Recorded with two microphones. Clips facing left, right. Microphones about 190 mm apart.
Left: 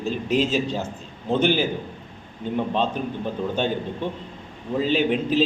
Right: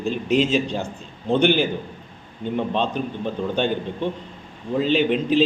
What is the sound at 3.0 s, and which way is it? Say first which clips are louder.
Speech: right 1 dB; 45° left (ahead or behind).